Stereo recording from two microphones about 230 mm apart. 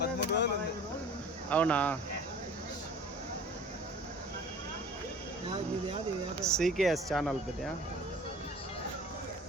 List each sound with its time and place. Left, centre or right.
0.0 s speech: left
1.5 s speech: centre
6.4 s speech: centre